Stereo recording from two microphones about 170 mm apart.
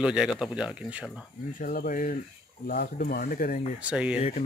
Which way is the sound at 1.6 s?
55° left (ahead or behind).